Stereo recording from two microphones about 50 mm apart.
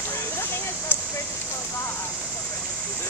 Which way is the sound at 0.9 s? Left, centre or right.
Left.